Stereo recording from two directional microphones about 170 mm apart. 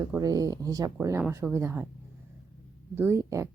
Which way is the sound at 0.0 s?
20° right (ahead or behind).